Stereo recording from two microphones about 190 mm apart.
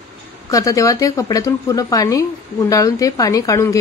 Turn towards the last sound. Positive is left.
turn(degrees=15)  # may be behind; listen again after turning